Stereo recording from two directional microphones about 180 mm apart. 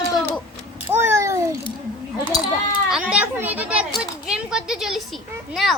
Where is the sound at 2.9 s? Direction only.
5° right (ahead or behind).